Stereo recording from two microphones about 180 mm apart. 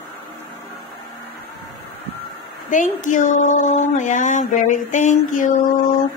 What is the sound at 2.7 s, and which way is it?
Speech, 45° left (ahead or behind).